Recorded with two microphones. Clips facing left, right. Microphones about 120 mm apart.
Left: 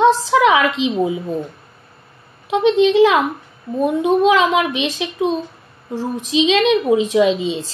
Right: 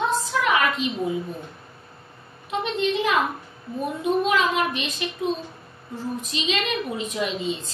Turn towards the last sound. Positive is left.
turn(degrees=90)